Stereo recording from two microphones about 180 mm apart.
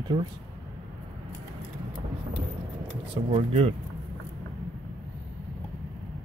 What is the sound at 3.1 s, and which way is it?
Speech, 30° right (ahead or behind).